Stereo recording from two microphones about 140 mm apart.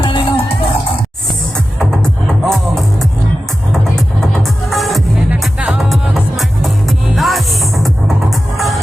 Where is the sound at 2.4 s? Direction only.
Centre (ahead or behind).